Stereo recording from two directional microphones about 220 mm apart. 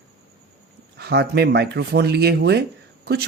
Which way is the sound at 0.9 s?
45° right (ahead or behind).